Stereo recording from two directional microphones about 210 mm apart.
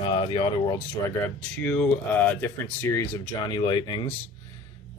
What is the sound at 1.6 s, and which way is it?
Speech, 5° left (ahead or behind).